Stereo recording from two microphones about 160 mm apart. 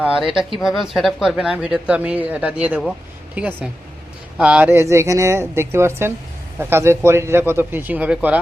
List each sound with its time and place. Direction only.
0.0 s speech: 5° right (ahead or behind)